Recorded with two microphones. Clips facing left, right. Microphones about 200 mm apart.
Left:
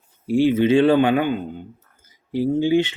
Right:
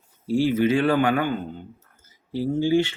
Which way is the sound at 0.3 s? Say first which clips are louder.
Left 4 dB; 20° left (ahead or behind).